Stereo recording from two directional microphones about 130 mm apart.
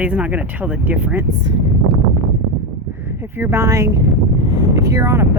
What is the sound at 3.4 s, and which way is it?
Speech, 20° right (ahead or behind).